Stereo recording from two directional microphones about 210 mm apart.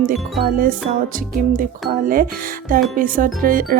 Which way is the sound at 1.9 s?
40° right (ahead or behind).